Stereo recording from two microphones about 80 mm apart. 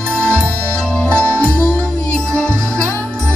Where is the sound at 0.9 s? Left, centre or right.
Centre.